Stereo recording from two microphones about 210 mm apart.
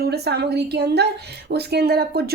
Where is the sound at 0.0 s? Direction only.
50° right (ahead or behind).